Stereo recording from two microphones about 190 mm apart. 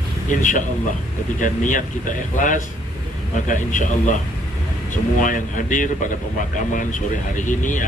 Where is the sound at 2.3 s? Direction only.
45° left (ahead or behind).